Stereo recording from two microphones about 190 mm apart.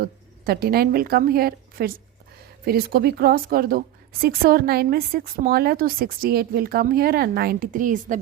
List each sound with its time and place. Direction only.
0.0 s a woman's voice: 55° right (ahead or behind)